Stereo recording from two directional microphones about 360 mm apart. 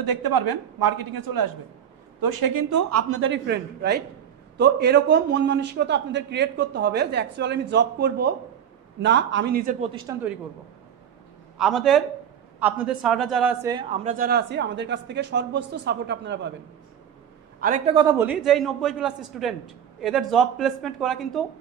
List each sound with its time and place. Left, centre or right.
0.0 s speech: right
2.9 s a man's voice: right; by 10.3 s centre
11.5 s a man's voice: centre; by 16.5 s right
17.6 s a man's voice: right; by 21.5 s centre